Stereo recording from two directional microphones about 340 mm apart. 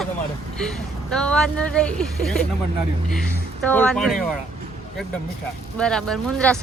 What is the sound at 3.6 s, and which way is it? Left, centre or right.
Speech, centre.